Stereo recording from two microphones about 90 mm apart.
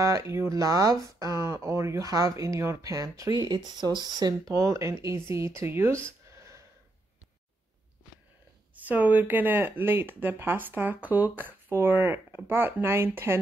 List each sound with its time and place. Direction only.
0.0 s speech: 35° right (ahead or behind)
8.8 s speech: 20° right (ahead or behind)